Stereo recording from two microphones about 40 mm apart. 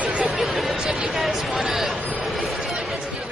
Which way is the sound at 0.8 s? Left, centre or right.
Centre.